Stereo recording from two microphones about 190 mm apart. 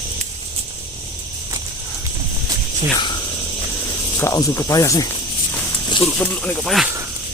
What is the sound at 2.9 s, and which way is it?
Speech, 25° left (ahead or behind).